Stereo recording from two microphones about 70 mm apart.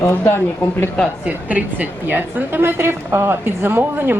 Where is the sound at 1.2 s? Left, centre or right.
Right.